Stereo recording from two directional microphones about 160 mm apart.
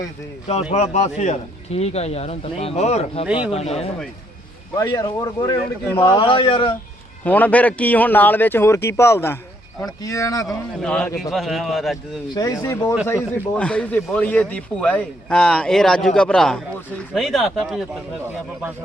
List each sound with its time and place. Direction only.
0.4 s a man's voice: 40° left (ahead or behind)
4.8 s speech: 20° left (ahead or behind)
6.0 s a man's voice: 30° left (ahead or behind)
7.3 s speech: 10° left (ahead or behind)
10.8 s a man's voice: 5° left (ahead or behind)
12.3 s a man's voice: 20° left (ahead or behind); by 17.8 s centre (ahead or behind)